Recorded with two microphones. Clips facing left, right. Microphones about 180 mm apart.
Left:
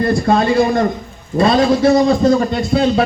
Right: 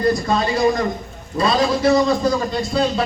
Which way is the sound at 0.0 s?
55° left (ahead or behind).